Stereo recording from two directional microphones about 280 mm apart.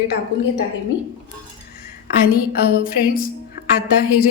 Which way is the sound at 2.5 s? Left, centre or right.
Left.